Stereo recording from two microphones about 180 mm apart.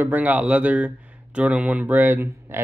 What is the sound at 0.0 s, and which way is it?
Speech, 10° right (ahead or behind).